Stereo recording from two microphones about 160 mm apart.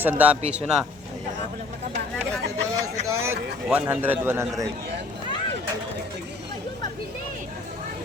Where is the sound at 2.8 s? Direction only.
20° right (ahead or behind).